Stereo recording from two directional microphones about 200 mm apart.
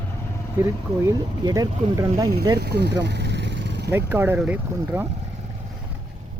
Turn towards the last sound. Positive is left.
turn(degrees=-10)  # may be behind; listen again after turning